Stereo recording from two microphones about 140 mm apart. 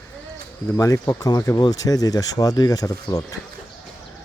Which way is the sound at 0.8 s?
25° left (ahead or behind).